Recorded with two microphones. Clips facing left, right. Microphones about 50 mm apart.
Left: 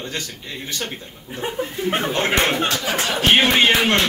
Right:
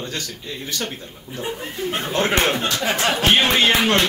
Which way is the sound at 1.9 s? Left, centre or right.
Left.